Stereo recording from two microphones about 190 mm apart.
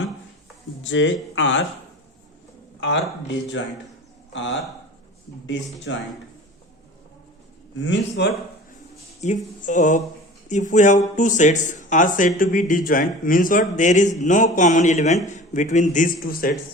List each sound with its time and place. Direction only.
0.9 s speech: 80° left
4.3 s a man's voice: 75° left (ahead or behind)
7.8 s speech: 70° left (ahead or behind)
9.2 s a man's voice: 40° left (ahead or behind)